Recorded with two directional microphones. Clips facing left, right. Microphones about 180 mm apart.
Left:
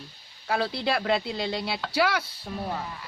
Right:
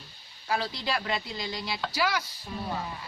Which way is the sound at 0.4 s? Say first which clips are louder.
Left 4 dB; 60° left (ahead or behind).